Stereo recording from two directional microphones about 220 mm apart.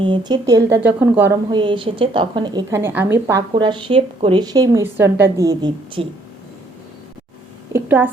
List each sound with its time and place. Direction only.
0.0 s a woman's voice: 20° right (ahead or behind)
1.5 s a woman's voice: 20° right (ahead or behind)
7.7 s a woman's voice: 10° right (ahead or behind)